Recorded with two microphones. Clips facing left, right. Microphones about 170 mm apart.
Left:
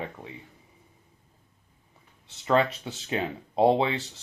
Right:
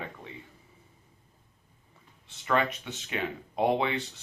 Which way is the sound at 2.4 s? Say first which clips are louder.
Left 4 dB; 30° left (ahead or behind).